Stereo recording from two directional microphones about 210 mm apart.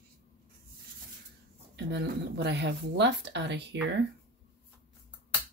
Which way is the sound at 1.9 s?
55° right (ahead or behind).